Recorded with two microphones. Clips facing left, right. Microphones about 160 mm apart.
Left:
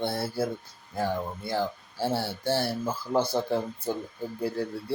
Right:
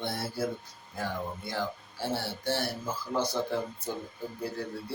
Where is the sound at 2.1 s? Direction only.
30° left (ahead or behind).